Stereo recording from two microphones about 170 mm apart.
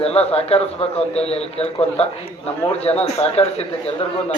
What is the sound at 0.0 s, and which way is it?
A man's voice, 35° left (ahead or behind).